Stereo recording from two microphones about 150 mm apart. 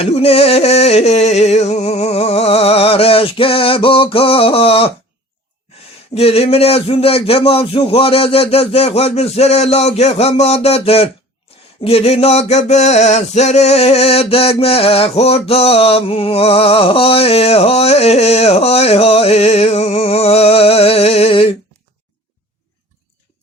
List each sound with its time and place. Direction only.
0.0 s a sound: 40° left (ahead or behind)
6.1 s speech: 40° left (ahead or behind)
11.8 s male singing: 40° left (ahead or behind)